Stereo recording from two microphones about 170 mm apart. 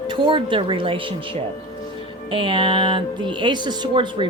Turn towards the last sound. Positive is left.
turn(degrees=-30)  # may be behind; listen again after turning